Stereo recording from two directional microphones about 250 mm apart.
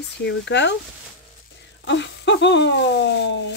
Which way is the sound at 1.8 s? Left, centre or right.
Left.